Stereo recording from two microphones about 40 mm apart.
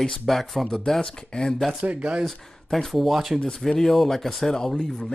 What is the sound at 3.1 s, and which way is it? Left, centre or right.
Speech, centre.